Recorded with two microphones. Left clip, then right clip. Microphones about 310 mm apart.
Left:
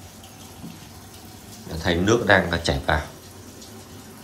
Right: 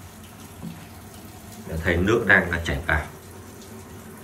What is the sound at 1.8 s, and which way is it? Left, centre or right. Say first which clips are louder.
Speech: left 1 dB; centre.